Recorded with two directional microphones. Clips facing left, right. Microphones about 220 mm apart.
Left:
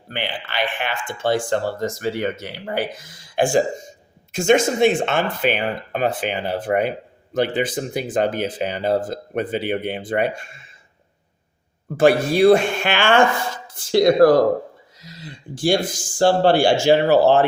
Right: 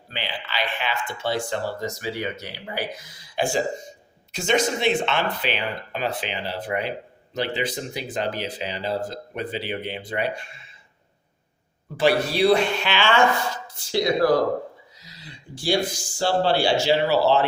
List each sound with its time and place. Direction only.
0.1 s speech: 50° left (ahead or behind)
11.9 s speech: 50° left (ahead or behind)